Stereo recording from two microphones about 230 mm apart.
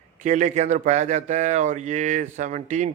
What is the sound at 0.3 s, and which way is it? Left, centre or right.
Speech, right.